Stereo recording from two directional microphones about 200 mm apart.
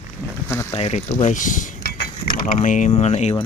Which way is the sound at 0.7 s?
30° left (ahead or behind).